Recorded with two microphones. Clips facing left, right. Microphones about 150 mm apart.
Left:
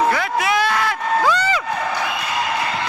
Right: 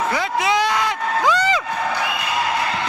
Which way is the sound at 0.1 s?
20° right (ahead or behind).